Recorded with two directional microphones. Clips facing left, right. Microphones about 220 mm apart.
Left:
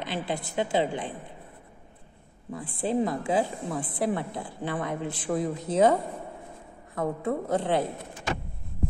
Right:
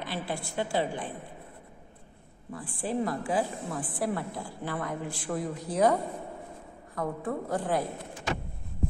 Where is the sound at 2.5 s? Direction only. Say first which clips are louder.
Left 4 dB; 20° left (ahead or behind).